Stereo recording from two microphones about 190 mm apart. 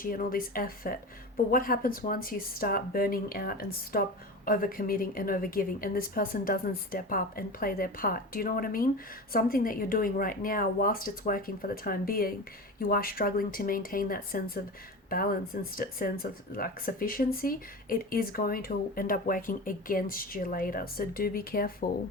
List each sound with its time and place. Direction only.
0.0 s speech: 50° left (ahead or behind)